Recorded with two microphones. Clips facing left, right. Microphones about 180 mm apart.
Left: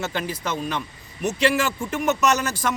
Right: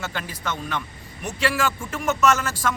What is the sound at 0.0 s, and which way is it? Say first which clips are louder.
A man's voice: left 4 dB; 20° left (ahead or behind).